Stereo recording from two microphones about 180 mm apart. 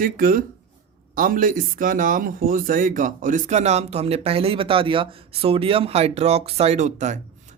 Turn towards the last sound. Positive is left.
turn(degrees=-40)  # may be behind; listen again after turning